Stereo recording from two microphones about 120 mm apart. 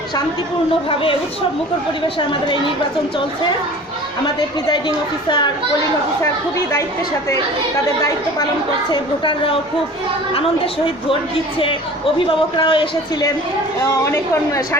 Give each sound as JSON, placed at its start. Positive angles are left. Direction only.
{"t": 0.9, "sound": "speech", "side_deg": 50}
{"t": 4.4, "sound": "a woman's voice", "side_deg": 35}
{"t": 8.9, "sound": "speech", "side_deg": 45}
{"t": 12.5, "sound": "speech", "side_deg": 45}
{"t": 13.8, "sound": "a woman's voice", "side_deg": 25}